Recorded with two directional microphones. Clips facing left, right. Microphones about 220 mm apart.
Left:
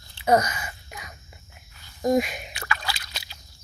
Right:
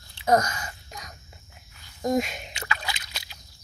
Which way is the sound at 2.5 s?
20° right (ahead or behind).